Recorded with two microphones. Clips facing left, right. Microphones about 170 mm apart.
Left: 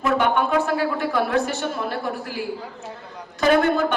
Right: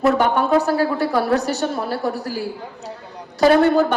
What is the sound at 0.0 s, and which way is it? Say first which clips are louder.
A woman's voice: right 3 dB; 40° right (ahead or behind).